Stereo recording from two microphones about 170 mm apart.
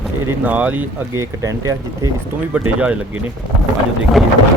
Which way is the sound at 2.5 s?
10° right (ahead or behind).